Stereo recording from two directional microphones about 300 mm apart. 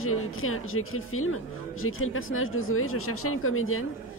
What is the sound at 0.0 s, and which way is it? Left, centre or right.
A woman's voice, left.